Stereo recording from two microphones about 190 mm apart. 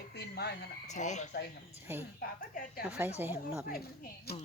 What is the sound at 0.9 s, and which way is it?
Speech, 40° left (ahead or behind).